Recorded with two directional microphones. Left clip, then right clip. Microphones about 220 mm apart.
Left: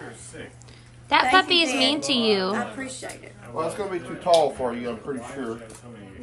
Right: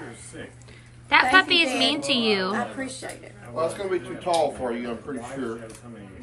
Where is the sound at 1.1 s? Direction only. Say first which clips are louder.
Right 1 dB; 5° left (ahead or behind).